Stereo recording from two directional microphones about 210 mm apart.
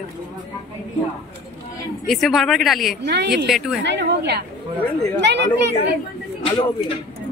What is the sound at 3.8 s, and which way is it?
Speech, 55° right (ahead or behind).